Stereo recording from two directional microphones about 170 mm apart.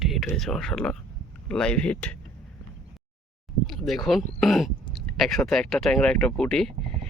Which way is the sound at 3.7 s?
Centre (ahead or behind).